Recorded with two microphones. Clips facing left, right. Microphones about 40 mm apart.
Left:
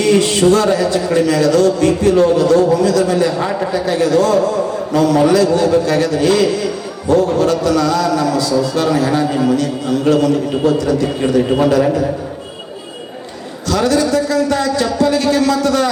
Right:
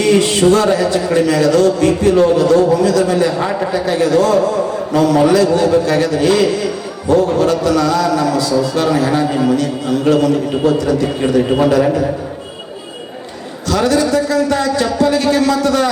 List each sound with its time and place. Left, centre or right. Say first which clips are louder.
0.0 s a man's voice: even; right
13.7 s a man's voice: even; right